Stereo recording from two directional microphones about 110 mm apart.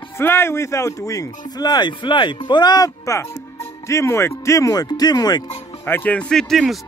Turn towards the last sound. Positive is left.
turn(degrees=0)  # may be behind; listen again after turning